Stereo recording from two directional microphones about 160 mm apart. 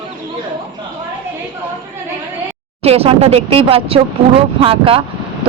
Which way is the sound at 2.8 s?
40° right (ahead or behind).